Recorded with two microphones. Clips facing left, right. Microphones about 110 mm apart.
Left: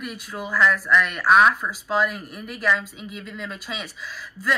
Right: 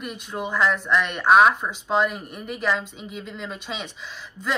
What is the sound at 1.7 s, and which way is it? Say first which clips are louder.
A woman's voice: right 1 dB; centre (ahead or behind).